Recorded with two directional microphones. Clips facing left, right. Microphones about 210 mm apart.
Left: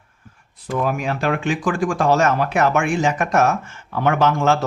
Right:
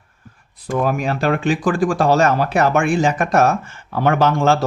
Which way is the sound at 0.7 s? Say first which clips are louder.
Right 3 dB; 40° right (ahead or behind).